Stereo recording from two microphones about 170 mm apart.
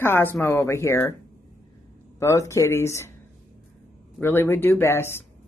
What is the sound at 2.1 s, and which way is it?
Speech, 20° left (ahead or behind).